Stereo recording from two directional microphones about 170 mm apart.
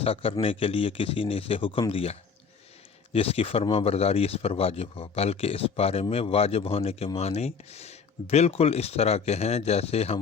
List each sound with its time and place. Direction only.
0.0 s speech: 35° left (ahead or behind)